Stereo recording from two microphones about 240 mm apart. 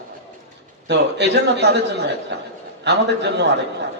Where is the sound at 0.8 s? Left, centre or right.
Right.